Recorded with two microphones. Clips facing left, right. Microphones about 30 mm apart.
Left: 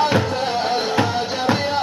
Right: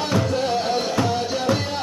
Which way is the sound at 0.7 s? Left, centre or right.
Left.